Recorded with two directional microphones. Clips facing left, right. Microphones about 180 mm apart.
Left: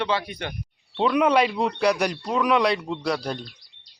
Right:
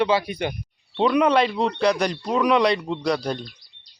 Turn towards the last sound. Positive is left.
turn(degrees=0)  # may be behind; listen again after turning